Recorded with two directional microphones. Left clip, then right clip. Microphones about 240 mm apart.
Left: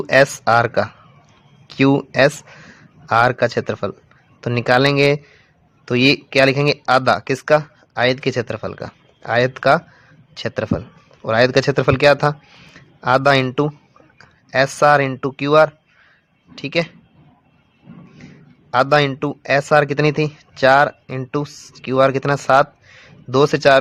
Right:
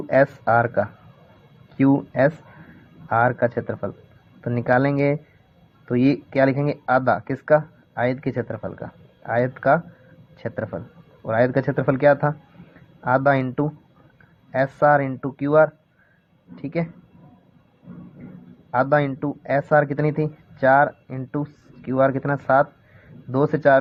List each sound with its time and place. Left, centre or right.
0.1 s speech: left
18.9 s speech: left